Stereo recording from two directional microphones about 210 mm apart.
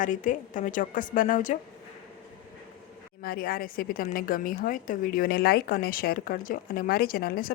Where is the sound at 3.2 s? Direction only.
45° left (ahead or behind).